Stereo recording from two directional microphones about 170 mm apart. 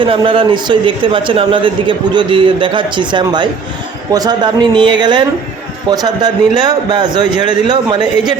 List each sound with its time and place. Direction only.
0.0 s a man's voice: 30° right (ahead or behind)